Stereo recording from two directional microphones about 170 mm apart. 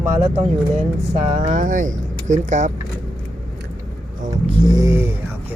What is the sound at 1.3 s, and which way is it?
Speech, 45° right (ahead or behind).